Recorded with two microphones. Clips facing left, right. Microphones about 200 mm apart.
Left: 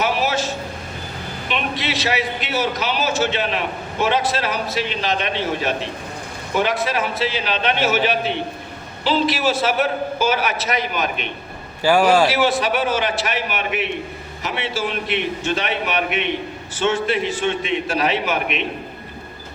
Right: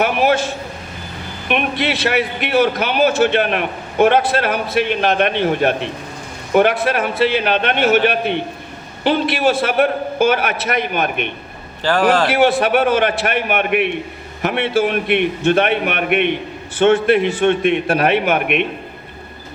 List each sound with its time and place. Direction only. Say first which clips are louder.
0.0 s a man's voice: right 5 dB; 55° right (ahead or behind)
11.8 s a man's voice: even; 10° left (ahead or behind)
12.3 s a man's voice: right 5 dB; 55° right (ahead or behind)